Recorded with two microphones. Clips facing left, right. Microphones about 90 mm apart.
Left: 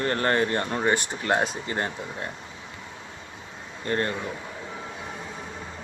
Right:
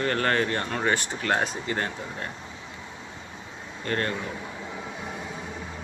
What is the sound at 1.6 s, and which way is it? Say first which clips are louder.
Speech: even; 25° left (ahead or behind).